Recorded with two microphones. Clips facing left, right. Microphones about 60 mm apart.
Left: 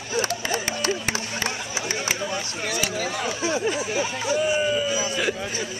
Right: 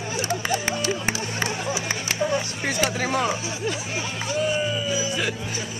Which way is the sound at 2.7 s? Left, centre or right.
Right.